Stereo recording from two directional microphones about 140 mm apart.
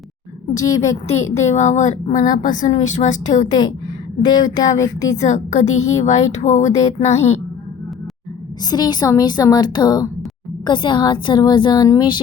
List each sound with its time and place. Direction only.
1.0 s a woman's voice: 50° left (ahead or behind)
4.2 s a woman's voice: 30° left (ahead or behind)
5.1 s a woman's voice: 55° left (ahead or behind)
8.6 s a woman's voice: 30° left (ahead or behind)